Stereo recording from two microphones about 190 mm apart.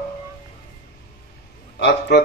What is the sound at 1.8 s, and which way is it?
Speech, 60° left (ahead or behind).